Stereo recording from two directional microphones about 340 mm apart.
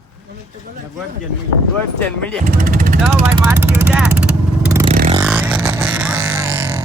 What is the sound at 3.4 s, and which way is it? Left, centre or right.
Vehicle, centre.